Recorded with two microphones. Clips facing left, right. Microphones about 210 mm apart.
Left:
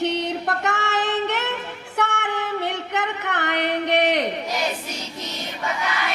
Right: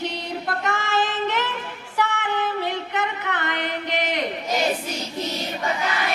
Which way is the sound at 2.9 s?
70° left (ahead or behind).